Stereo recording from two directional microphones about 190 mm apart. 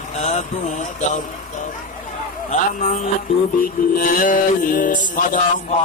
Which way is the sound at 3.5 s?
50° left (ahead or behind).